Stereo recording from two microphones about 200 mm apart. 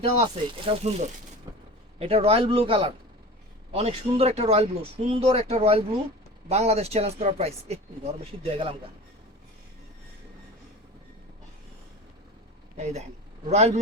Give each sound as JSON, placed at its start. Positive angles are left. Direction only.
{"t": 0.0, "sound": "speech", "side_deg": -30}
{"t": 2.0, "sound": "speech", "side_deg": -30}
{"t": 12.7, "sound": "speech", "side_deg": -35}